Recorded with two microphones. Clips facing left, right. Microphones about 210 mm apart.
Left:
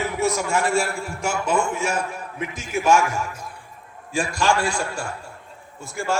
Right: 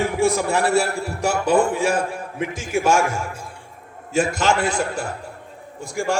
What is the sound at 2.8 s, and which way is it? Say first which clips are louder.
A man's voice: even; 30° right (ahead or behind).